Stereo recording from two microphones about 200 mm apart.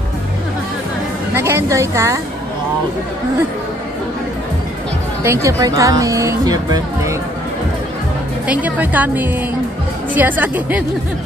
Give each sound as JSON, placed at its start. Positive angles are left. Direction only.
{"t": 1.3, "sound": "a woman's voice", "side_deg": -15}
{"t": 5.2, "sound": "speech", "side_deg": -15}
{"t": 8.5, "sound": "speech", "side_deg": -10}